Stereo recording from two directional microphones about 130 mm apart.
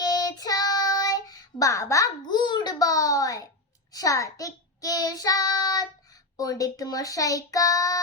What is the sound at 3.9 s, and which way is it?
Child singing, 25° left (ahead or behind).